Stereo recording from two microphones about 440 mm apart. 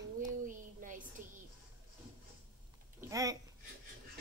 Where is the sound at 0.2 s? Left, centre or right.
Centre.